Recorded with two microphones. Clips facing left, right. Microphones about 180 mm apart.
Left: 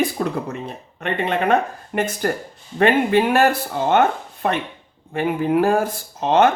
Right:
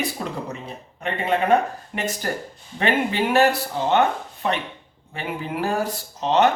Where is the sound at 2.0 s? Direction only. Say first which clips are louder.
Left 5 dB; 55° left (ahead or behind).